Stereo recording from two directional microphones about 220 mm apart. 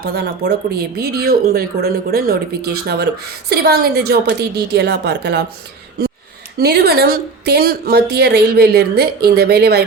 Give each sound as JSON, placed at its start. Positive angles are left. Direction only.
{"t": 0.0, "sound": "speech", "side_deg": -45}
{"t": 6.6, "sound": "speech", "side_deg": -45}